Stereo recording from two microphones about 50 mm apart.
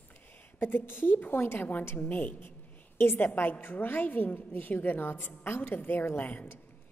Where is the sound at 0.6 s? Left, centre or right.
Left.